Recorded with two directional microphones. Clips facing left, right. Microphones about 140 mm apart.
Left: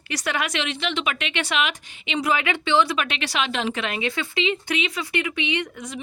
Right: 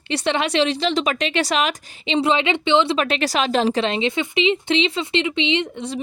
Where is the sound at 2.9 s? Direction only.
35° right (ahead or behind).